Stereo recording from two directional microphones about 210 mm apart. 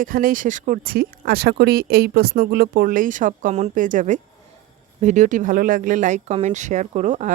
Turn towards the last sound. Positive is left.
turn(degrees=-35)  # may be behind; listen again after turning